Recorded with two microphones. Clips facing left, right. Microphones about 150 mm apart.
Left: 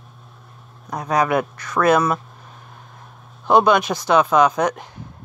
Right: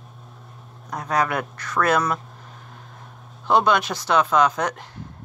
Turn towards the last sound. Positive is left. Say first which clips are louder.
# left 4 dB
turn(degrees=15)  # may be behind; listen again after turning